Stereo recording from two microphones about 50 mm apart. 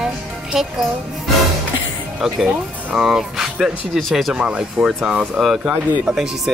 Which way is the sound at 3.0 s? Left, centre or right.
Centre.